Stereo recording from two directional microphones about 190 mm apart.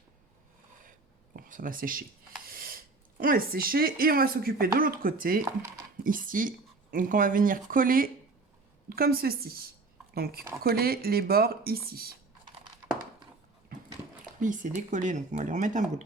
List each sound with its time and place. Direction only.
1.4 s speech: 45° right (ahead or behind)
13.7 s dog: 50° right (ahead or behind)
14.4 s speech: 45° right (ahead or behind)